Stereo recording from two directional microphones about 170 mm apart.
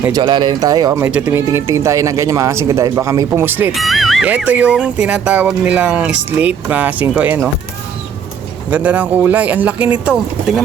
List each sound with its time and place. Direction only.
0.1 s speech: 25° right (ahead or behind)
3.7 s speech: centre (ahead or behind)
8.7 s speech: 10° right (ahead or behind)